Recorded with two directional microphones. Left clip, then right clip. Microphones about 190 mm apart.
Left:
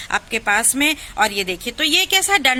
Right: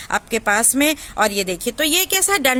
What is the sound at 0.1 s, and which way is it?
A woman's voice, 55° right (ahead or behind).